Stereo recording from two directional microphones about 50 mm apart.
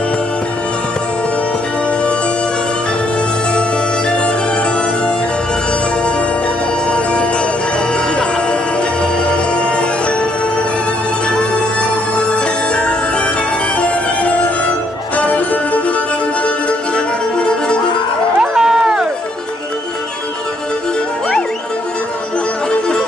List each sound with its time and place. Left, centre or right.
13.7 s music: left
17.4 s music: centre
18.4 s run: centre